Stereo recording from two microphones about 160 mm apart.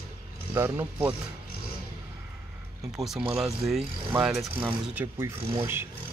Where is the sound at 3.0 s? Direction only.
5° right (ahead or behind).